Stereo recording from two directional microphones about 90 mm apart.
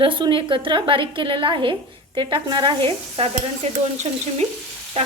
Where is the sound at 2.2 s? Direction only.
55° right (ahead or behind); by 3.3 s 85° right.